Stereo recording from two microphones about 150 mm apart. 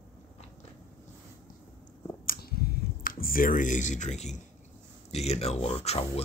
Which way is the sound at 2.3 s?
90° left.